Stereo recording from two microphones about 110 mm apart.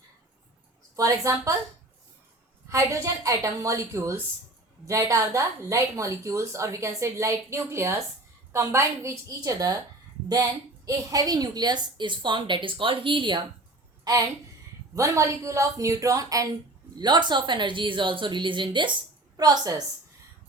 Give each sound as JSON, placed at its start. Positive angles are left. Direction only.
{"t": 0.9, "sound": "a woman's voice", "side_deg": -30}
{"t": 2.6, "sound": "a woman's voice", "side_deg": -25}
{"t": 10.8, "sound": "a woman's voice", "side_deg": -35}
{"t": 14.0, "sound": "a woman's voice", "side_deg": -35}
{"t": 17.0, "sound": "a woman's voice", "side_deg": -40}
{"t": 19.4, "sound": "a woman's voice", "side_deg": -35}